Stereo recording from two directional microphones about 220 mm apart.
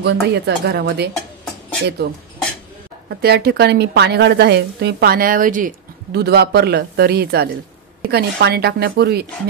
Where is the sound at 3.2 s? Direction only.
45° right (ahead or behind).